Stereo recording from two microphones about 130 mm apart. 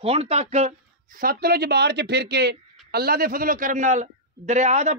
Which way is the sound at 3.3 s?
90° right.